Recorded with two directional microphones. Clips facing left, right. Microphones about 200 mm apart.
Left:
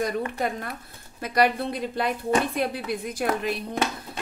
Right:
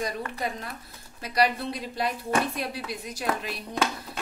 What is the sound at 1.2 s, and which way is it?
A woman's voice, 55° left (ahead or behind).